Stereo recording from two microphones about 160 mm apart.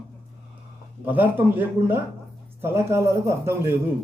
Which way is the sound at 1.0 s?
10° right (ahead or behind).